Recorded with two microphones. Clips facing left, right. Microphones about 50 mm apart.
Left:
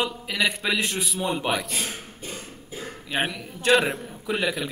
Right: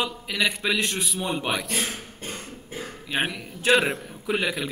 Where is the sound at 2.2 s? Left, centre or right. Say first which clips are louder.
Right 1 dB; right.